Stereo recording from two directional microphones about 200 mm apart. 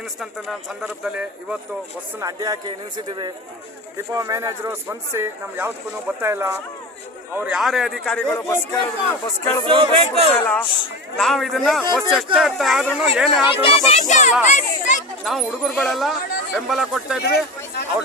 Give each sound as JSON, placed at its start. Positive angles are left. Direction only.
{"t": 0.2, "sound": "speech", "side_deg": 0}
{"t": 2.1, "sound": "a man's voice", "side_deg": -15}
{"t": 9.6, "sound": "speech", "side_deg": -25}
{"t": 10.4, "sound": "a man's voice", "side_deg": 10}
{"t": 13.6, "sound": "speech", "side_deg": 30}
{"t": 15.2, "sound": "speech", "side_deg": 0}